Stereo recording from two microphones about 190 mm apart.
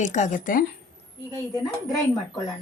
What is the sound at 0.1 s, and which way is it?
Speech, 40° left (ahead or behind).